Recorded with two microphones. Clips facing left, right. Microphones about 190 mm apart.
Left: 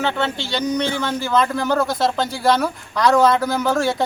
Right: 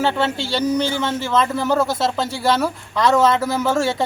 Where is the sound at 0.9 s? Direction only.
Centre (ahead or behind).